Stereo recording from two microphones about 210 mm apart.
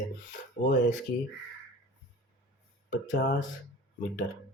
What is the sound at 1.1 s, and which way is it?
Speech, 45° left (ahead or behind).